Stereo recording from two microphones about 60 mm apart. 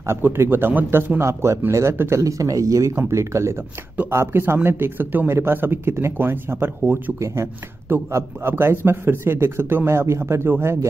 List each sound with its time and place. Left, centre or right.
0.0 s speech: right
8.1 s speech: right